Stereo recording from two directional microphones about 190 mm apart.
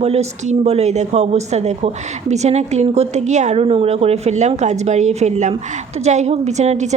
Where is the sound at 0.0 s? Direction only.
35° right (ahead or behind).